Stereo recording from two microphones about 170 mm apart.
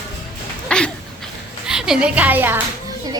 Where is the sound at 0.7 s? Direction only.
5° left (ahead or behind).